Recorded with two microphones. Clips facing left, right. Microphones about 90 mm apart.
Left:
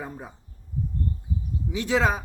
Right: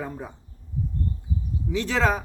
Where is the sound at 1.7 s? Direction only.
15° left (ahead or behind).